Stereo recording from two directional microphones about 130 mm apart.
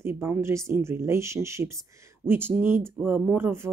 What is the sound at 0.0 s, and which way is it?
Speech, 15° right (ahead or behind).